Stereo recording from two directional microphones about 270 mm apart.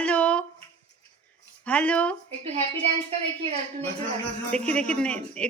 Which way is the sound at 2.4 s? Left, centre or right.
Right.